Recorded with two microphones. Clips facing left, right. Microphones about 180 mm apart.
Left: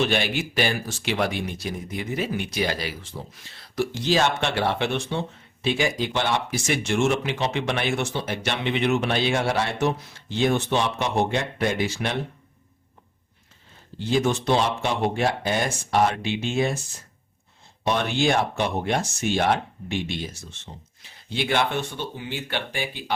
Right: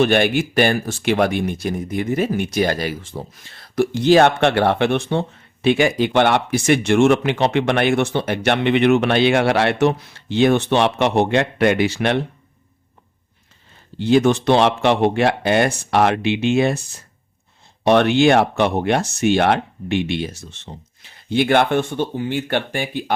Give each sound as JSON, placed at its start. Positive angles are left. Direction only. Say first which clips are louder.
{"t": 0.0, "sound": "speech", "louder": "right 8 dB", "side_deg": -55}
{"t": 14.0, "sound": "speech", "louder": "right 8 dB", "side_deg": -70}
{"t": 17.8, "sound": "speech", "louder": "right 9 dB", "side_deg": -70}